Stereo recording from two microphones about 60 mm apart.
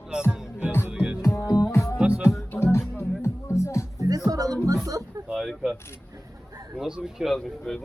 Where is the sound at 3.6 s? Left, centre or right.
Left.